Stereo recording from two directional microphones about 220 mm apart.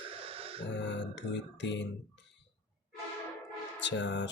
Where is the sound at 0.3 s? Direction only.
25° right (ahead or behind).